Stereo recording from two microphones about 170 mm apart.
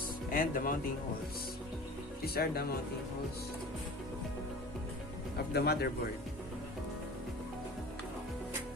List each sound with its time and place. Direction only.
0.3 s speech: 55° left (ahead or behind)
2.2 s speech: 65° left (ahead or behind)
5.5 s speech: 75° left (ahead or behind)